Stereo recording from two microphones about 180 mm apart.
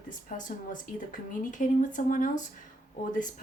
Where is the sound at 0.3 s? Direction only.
45° left (ahead or behind).